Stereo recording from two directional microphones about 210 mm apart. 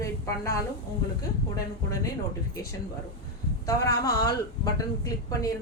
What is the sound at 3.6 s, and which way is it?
Speech, 15° left (ahead or behind).